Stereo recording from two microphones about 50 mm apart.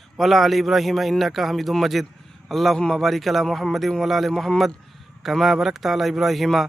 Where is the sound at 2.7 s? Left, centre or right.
Centre.